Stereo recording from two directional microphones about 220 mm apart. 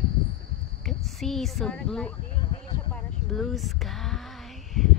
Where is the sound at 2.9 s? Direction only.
Centre (ahead or behind).